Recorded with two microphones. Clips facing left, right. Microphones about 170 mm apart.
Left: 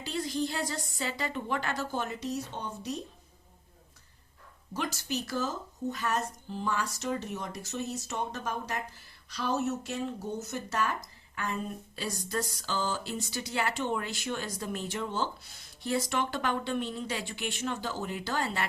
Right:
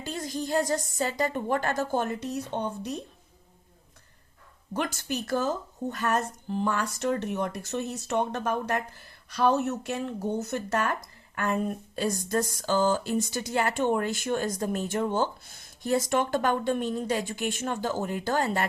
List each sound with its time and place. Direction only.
0.0 s speech: 45° right (ahead or behind)
4.7 s speech: 55° right (ahead or behind)